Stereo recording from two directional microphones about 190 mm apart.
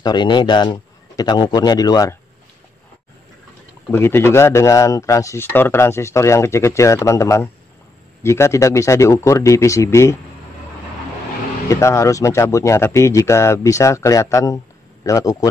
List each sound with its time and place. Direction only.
0.0 s a man's voice: 25° left (ahead or behind)
3.9 s speech: 15° left (ahead or behind)
11.7 s speech: 15° left (ahead or behind)